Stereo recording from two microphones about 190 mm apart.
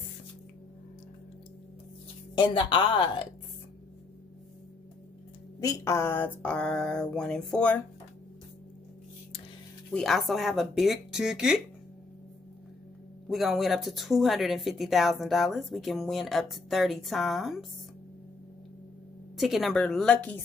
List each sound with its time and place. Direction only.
2.3 s speech: 25° left (ahead or behind)
5.6 s speech: 15° left (ahead or behind)
9.8 s speech: 5° left (ahead or behind)
13.3 s speech: centre (ahead or behind)
19.3 s speech: centre (ahead or behind)